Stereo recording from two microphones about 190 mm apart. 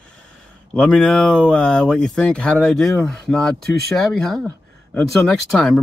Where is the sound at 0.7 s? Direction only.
5° left (ahead or behind).